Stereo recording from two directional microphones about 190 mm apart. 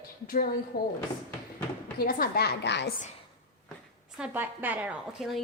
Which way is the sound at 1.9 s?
50° left (ahead or behind).